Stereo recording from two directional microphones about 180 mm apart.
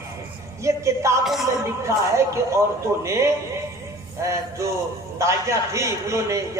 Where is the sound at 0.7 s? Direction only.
15° right (ahead or behind).